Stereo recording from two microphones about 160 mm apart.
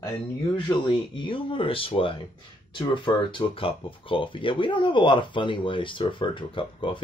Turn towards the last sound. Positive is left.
turn(degrees=30)  # may be behind; listen again after turning